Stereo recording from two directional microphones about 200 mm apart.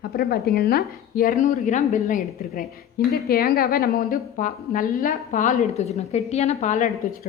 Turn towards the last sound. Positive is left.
turn(degrees=35)  # may be behind; listen again after turning